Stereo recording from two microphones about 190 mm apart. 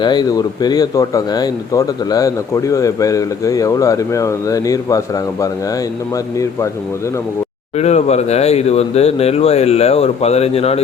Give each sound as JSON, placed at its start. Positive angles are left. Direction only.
{"t": 0.0, "sound": "speech", "side_deg": 20}
{"t": 7.8, "sound": "speech", "side_deg": 35}